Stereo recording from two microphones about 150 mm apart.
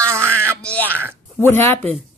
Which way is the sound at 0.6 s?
10° left (ahead or behind).